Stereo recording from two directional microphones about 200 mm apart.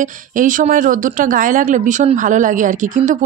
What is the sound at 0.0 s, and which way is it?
A woman's voice, 40° right (ahead or behind).